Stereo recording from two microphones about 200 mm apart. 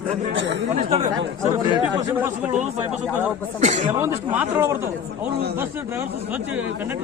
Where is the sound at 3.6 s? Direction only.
35° right (ahead or behind).